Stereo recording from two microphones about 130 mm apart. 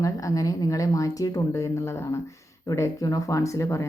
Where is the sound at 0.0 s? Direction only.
25° left (ahead or behind).